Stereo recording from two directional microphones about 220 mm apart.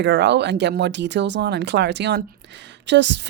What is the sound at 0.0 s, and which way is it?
Speech, 50° right (ahead or behind).